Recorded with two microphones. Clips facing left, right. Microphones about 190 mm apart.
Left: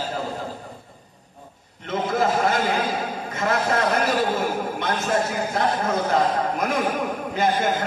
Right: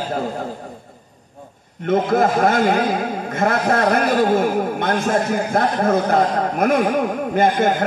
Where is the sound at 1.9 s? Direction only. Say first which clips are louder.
Right 6 dB; 55° right (ahead or behind).